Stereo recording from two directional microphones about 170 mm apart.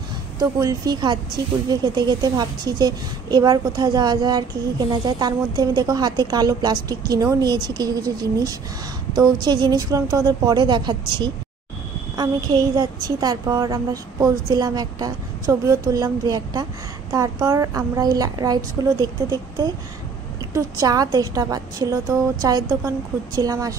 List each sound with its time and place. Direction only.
0.4 s speech: 20° right (ahead or behind)